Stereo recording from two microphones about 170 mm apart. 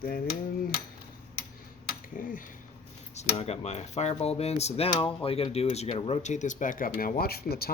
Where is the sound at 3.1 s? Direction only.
40° left (ahead or behind).